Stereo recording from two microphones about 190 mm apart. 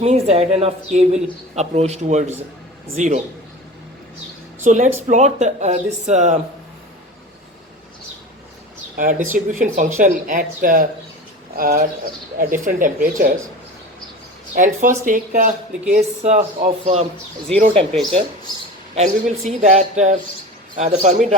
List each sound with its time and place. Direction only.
0.0 s a man's voice: 35° right (ahead or behind)
4.6 s a man's voice: 40° right (ahead or behind)
9.0 s speech: 45° right (ahead or behind)
14.5 s a man's voice: 45° right (ahead or behind)
18.9 s a man's voice: 35° right (ahead or behind)